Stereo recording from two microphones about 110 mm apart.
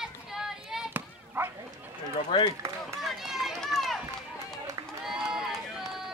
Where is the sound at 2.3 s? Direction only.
45° left (ahead or behind).